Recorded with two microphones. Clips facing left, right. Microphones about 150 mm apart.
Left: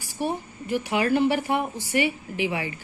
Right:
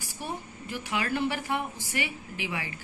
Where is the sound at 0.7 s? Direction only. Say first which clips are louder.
Left 8 dB; 15° left (ahead or behind).